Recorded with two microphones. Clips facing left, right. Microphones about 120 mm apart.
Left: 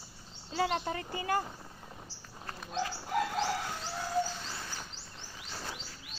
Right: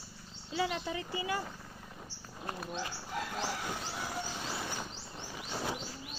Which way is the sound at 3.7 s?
10° right (ahead or behind).